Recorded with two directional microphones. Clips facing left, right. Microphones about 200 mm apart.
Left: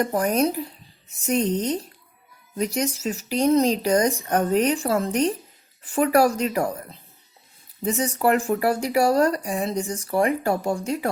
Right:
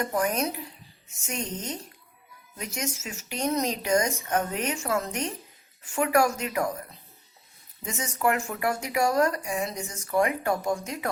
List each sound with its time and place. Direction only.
0.0 s speech: 35° left (ahead or behind)